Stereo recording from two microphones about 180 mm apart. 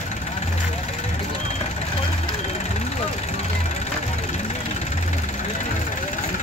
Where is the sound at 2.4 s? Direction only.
40° left (ahead or behind).